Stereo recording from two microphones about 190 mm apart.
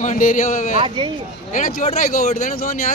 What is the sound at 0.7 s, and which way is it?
Speech, 25° right (ahead or behind).